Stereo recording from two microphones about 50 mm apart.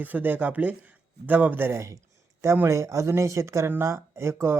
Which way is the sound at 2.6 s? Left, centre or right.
Right.